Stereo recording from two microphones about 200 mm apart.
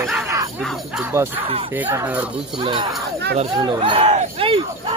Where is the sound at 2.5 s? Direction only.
25° right (ahead or behind).